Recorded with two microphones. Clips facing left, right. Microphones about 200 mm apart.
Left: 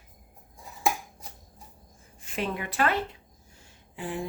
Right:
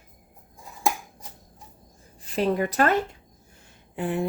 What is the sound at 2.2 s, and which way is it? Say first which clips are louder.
Speech: right 8 dB; 35° right (ahead or behind).